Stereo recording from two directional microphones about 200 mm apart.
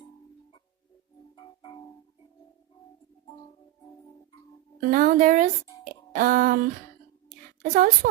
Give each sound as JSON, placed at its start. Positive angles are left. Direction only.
{"t": 4.8, "sound": "speech", "side_deg": -45}
{"t": 5.8, "sound": "a sound", "side_deg": -45}
{"t": 7.6, "sound": "a woman's voice", "side_deg": -40}